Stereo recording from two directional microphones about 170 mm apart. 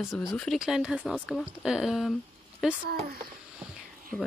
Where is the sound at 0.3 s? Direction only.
Centre (ahead or behind).